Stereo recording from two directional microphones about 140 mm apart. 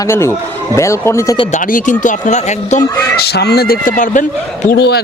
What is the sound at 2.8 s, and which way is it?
Speech, 15° left (ahead or behind).